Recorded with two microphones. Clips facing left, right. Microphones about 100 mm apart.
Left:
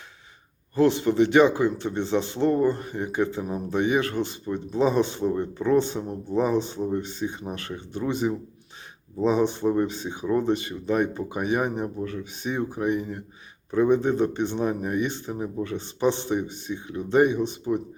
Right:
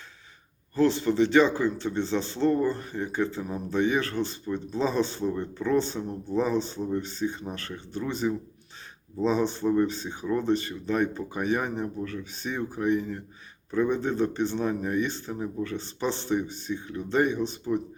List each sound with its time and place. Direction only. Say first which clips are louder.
0.8 s speech: left 3 dB; 15° left (ahead or behind)